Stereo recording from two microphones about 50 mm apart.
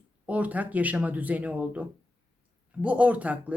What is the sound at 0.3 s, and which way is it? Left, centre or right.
Speech, right.